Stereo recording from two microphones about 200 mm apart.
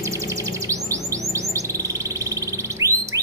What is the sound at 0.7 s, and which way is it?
Music, 15° right (ahead or behind).